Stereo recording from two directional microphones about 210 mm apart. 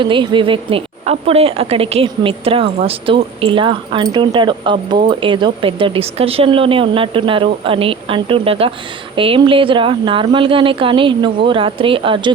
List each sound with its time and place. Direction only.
0.0 s a woman's voice: 20° right (ahead or behind)